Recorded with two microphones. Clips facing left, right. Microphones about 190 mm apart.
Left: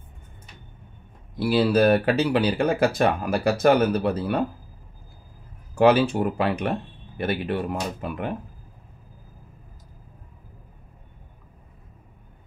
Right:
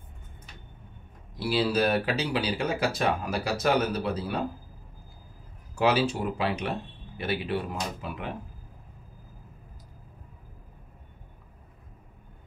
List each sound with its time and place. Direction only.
1.4 s speech: 55° left (ahead or behind)
5.8 s speech: 55° left (ahead or behind)